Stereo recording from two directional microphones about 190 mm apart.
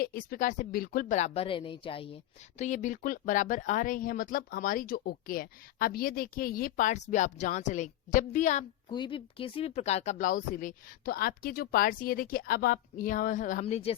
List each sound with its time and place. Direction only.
0.0 s speech: 50° left (ahead or behind); by 2.0 s 30° left (ahead or behind)
2.6 s speech: 40° left (ahead or behind)
8.9 s speech: 25° left (ahead or behind)